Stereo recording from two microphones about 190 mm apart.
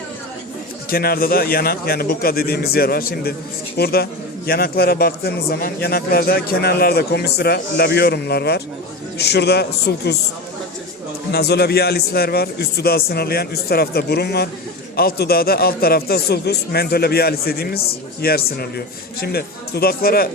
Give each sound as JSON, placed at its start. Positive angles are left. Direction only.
{"t": 0.9, "sound": "a man's voice", "side_deg": 50}
{"t": 11.3, "sound": "a man's voice", "side_deg": 60}